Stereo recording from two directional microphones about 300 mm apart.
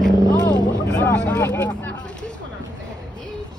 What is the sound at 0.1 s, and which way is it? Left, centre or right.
Vehicle, centre.